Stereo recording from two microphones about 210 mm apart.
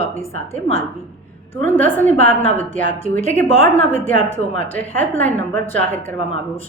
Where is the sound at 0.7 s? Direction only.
30° left (ahead or behind).